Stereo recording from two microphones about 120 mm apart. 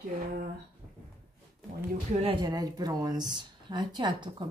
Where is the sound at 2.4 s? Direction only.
35° right (ahead or behind).